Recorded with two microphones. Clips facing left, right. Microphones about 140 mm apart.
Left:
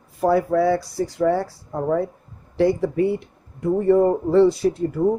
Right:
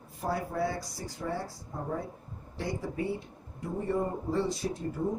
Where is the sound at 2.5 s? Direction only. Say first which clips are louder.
Left 16 dB; 70° left (ahead or behind).